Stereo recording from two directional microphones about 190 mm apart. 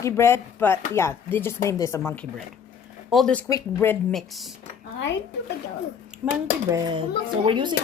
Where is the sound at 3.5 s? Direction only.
15° left (ahead or behind).